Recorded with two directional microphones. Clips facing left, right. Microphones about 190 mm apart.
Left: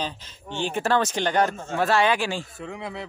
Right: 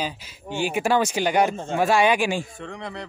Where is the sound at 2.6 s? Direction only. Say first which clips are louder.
Even; 5° left (ahead or behind).